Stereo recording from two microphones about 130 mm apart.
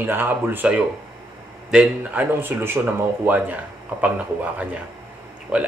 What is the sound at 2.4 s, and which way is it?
Speech, 15° right (ahead or behind).